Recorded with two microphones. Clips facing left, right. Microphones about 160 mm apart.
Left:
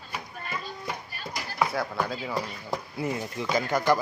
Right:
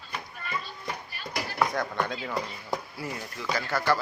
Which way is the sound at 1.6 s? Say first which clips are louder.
Left 1 dB; 5° left (ahead or behind).